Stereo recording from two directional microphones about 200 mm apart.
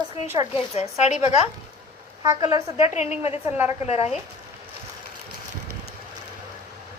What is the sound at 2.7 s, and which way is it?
Speech, 35° left (ahead or behind).